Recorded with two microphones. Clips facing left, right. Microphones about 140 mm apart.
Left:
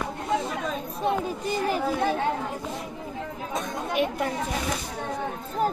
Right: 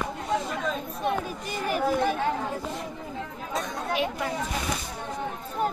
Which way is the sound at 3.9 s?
50° left (ahead or behind).